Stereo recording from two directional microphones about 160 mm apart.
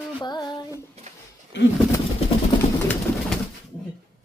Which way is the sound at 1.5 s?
90° left.